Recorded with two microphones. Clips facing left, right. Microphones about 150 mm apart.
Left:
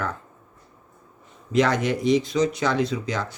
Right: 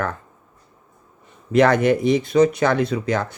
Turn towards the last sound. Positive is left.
turn(degrees=-55)  # may be behind; listen again after turning